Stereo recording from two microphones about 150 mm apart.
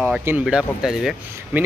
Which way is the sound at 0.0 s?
10° right (ahead or behind).